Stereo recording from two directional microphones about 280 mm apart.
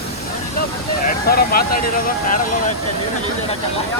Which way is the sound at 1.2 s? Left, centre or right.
Left.